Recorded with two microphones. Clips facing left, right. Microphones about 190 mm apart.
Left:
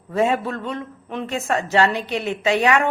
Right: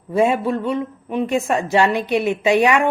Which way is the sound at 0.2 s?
15° right (ahead or behind).